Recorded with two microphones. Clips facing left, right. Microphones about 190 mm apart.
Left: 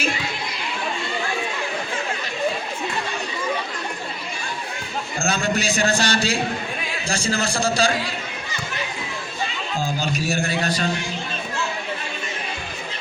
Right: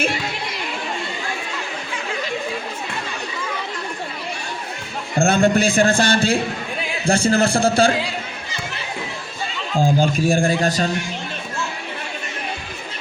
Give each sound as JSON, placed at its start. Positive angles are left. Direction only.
{"t": 5.2, "sound": "a man's voice", "side_deg": -55}
{"t": 9.8, "sound": "a man's voice", "side_deg": -50}